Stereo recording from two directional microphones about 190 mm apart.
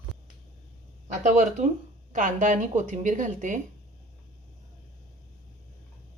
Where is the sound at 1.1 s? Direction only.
40° right (ahead or behind).